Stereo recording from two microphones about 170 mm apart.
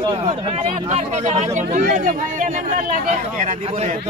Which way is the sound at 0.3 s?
45° right (ahead or behind).